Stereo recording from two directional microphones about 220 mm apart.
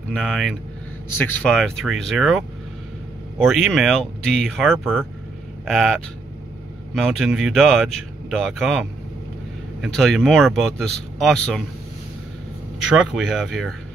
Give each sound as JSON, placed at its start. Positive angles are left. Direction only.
{"t": 0.1, "sound": "speech", "side_deg": 5}
{"t": 7.0, "sound": "speech", "side_deg": 0}
{"t": 12.7, "sound": "speech", "side_deg": 0}